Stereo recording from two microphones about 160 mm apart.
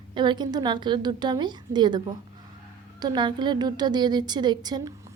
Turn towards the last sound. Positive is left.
turn(degrees=-25)  # may be behind; listen again after turning